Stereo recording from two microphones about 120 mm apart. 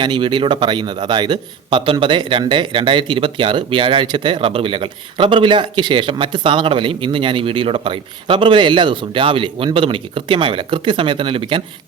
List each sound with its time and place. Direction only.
0.0 s a man's voice: 40° right (ahead or behind)